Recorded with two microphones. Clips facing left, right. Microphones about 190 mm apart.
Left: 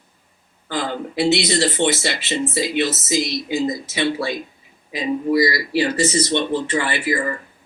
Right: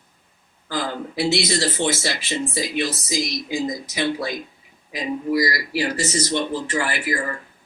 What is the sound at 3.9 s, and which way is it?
Speech, 70° left (ahead or behind).